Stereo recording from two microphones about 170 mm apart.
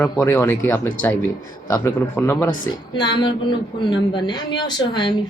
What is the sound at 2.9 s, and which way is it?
A man's voice, 25° left (ahead or behind).